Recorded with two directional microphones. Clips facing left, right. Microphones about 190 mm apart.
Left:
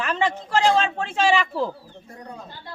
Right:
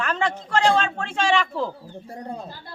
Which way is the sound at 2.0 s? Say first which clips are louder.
Right 6 dB; 30° right (ahead or behind).